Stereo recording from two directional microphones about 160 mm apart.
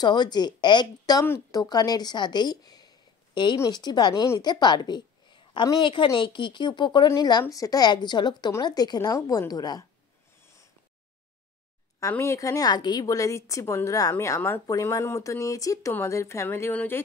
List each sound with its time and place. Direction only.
0.0 s a woman's voice: 25° left (ahead or behind)
12.0 s a woman's voice: 15° left (ahead or behind)